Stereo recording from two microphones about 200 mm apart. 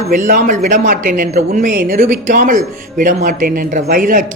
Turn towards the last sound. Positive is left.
turn(degrees=-45)  # may be behind; listen again after turning